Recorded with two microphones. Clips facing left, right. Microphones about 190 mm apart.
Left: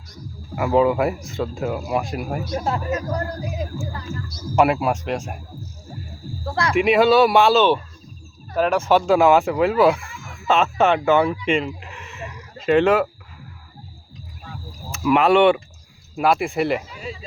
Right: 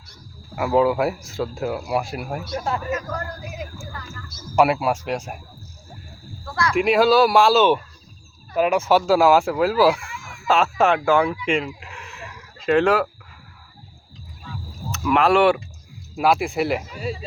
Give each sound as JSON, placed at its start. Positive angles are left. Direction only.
{"t": 0.5, "sound": "speech", "side_deg": 0}
{"t": 3.1, "sound": "speech", "side_deg": 30}
{"t": 4.5, "sound": "speech", "side_deg": 0}
{"t": 6.4, "sound": "speech", "side_deg": 25}
{"t": 6.7, "sound": "speech", "side_deg": 0}
{"t": 11.4, "sound": "a sound", "side_deg": 0}
{"t": 12.6, "sound": "speech", "side_deg": 0}
{"t": 14.9, "sound": "speech", "side_deg": 5}
{"t": 16.9, "sound": "speech", "side_deg": -40}